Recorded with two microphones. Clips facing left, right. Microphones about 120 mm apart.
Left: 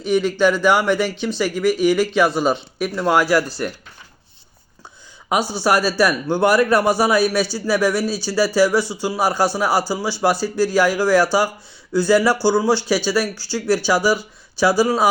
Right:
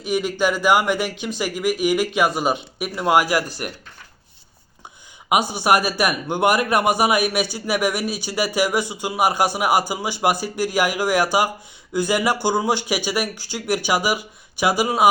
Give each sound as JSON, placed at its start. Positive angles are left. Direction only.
{"t": 0.0, "sound": "a man's voice", "side_deg": -10}
{"t": 5.3, "sound": "a man's voice", "side_deg": -20}